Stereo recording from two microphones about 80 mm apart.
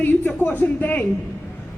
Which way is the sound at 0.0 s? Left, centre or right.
Left.